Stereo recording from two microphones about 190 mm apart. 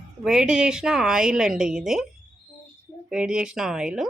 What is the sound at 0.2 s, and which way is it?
Speech, 5° right (ahead or behind).